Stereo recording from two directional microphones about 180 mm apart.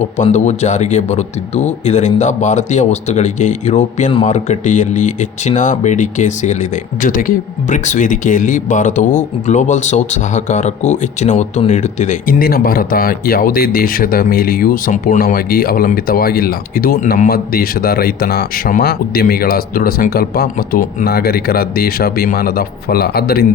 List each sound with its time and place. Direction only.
0.2 s speech: 40° left (ahead or behind); by 23.6 s 60° left (ahead or behind)